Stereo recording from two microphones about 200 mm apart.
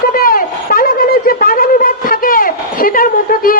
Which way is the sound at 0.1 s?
45° left (ahead or behind).